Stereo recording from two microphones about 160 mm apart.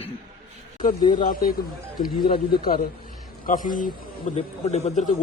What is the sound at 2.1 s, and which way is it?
Speech, 30° left (ahead or behind).